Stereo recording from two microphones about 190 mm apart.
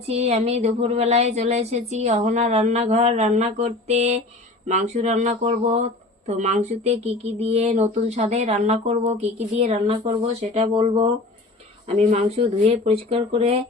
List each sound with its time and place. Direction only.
0.1 s speech: 35° right (ahead or behind)